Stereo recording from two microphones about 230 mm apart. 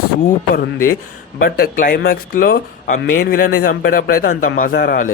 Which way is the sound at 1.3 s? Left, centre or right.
Left.